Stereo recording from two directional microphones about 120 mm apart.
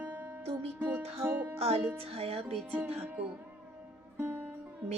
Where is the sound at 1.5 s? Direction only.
60° right (ahead or behind).